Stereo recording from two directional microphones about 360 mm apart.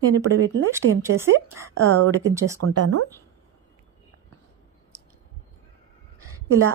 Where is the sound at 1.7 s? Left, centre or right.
Right.